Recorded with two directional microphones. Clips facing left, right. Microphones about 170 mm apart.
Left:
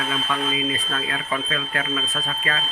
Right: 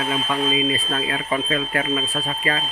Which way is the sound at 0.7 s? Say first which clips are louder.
Right 4 dB; 30° right (ahead or behind).